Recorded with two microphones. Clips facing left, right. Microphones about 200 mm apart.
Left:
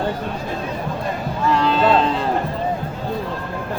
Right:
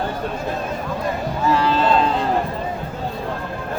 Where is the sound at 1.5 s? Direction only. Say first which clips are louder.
Left 1 dB; 5° right (ahead or behind).